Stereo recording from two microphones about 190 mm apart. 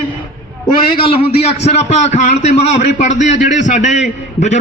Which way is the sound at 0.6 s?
30° left (ahead or behind).